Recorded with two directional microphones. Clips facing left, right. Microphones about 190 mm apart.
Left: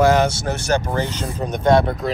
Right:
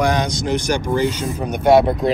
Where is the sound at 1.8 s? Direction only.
25° right (ahead or behind).